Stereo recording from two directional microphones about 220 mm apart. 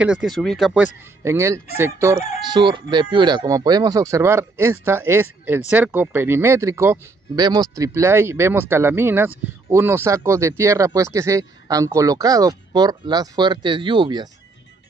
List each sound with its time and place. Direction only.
0.0 s speech: 5° right (ahead or behind)
1.2 s speech: 15° right (ahead or behind)